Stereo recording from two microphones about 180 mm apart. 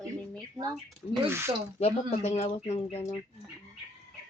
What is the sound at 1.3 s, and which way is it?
Speech, 15° right (ahead or behind).